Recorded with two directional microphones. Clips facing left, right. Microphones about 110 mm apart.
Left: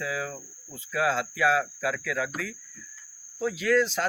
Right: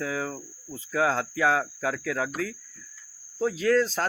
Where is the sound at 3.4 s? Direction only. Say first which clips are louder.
Right 1 dB; 35° right (ahead or behind).